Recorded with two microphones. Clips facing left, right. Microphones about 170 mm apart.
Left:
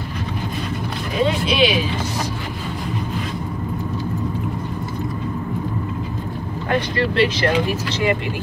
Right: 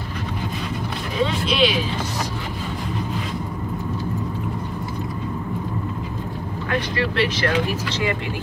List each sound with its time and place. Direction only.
1.6 s vehicle: 10° left (ahead or behind)
6.7 s speech: 25° left (ahead or behind)